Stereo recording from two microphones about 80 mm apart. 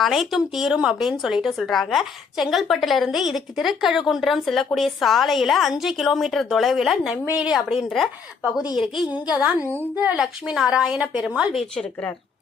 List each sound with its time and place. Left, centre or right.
0.0 s speech: centre
7.3 s a woman's voice: centre
7.5 s a woman's voice: centre